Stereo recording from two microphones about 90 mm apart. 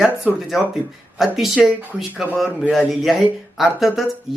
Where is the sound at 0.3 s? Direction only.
10° right (ahead or behind).